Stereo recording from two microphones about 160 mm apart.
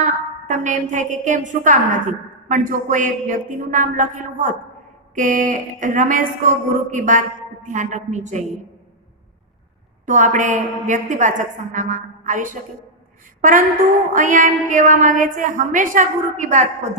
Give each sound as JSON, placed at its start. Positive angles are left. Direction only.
{"t": 0.0, "sound": "a woman's voice", "side_deg": -50}
{"t": 10.1, "sound": "a woman's voice", "side_deg": -50}